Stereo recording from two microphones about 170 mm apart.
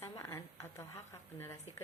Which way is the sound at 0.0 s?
15° left (ahead or behind).